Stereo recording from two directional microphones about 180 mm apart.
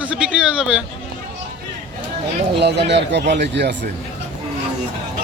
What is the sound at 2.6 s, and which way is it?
Speech, 70° right (ahead or behind).